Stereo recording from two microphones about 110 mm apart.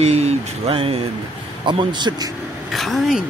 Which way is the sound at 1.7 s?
45° right (ahead or behind).